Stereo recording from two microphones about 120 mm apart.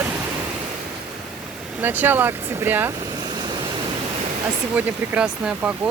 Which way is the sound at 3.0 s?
35° right (ahead or behind).